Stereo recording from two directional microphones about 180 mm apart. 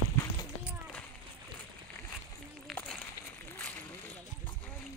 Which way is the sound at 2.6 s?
5° left (ahead or behind).